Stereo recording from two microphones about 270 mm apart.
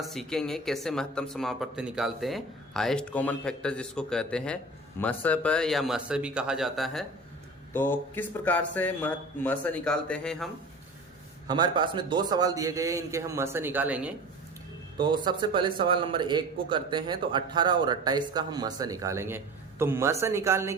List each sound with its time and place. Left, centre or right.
0.0 s speech: centre
11.4 s a man's voice: centre
14.9 s a man's voice: centre